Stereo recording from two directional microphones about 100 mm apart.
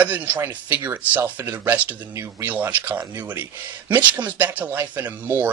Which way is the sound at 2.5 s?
15° right (ahead or behind).